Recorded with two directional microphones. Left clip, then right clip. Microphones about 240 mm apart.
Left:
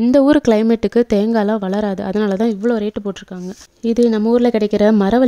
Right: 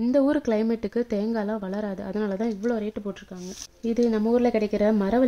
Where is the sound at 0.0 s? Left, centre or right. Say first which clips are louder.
Left 10 dB; left.